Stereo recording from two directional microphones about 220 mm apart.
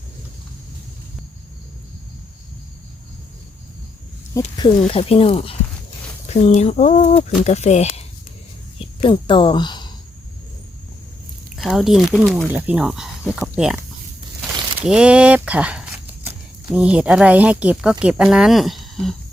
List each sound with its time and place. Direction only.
4.4 s speech: 20° left (ahead or behind)
9.0 s speech: 20° left (ahead or behind)
11.5 s speech: centre (ahead or behind)
14.8 s speech: 5° right (ahead or behind)